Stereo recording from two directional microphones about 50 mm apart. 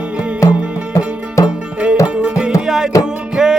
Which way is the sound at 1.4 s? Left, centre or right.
Left.